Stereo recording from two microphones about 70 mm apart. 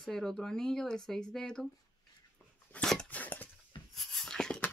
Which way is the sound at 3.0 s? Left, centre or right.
Left.